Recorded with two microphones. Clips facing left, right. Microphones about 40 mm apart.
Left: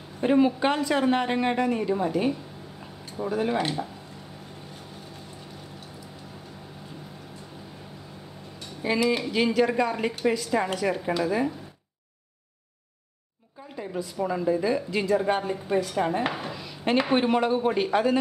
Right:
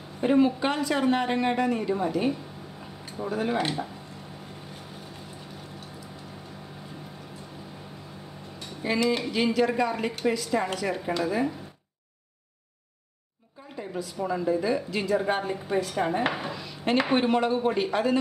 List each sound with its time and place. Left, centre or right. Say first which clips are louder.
0.2 s a woman's voice: left 1 dB; centre
8.8 s a woman's voice: left 1 dB; centre
13.7 s a woman's voice: left 2 dB; centre